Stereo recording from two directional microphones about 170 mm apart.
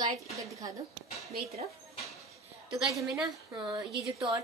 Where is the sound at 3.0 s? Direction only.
Centre (ahead or behind).